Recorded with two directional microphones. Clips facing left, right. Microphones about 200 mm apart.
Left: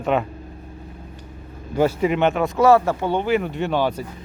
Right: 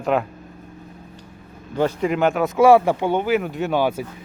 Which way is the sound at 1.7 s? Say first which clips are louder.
Left 1 dB; 5° left (ahead or behind).